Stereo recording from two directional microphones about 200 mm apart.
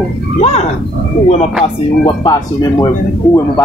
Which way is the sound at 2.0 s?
20° left (ahead or behind).